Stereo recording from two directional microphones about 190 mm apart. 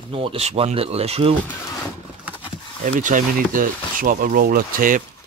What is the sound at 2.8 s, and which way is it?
Speech, 45° right (ahead or behind).